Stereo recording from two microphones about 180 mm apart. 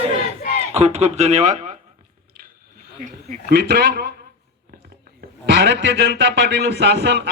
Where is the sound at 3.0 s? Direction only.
50° right (ahead or behind).